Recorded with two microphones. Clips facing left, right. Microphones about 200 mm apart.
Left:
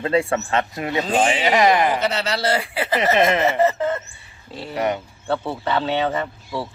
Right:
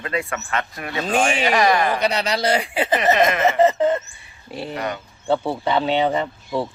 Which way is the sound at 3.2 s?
25° left (ahead or behind).